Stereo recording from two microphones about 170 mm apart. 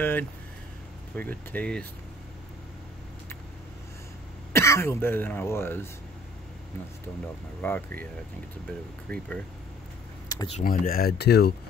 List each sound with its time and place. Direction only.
0.0 s speech: 10° left (ahead or behind)
4.5 s speech: 15° left (ahead or behind)
7.6 s speech: 15° left (ahead or behind)
9.1 s speech: 5° left (ahead or behind)
10.2 s a sound: 20° left (ahead or behind)
10.6 s speech: 55° left (ahead or behind)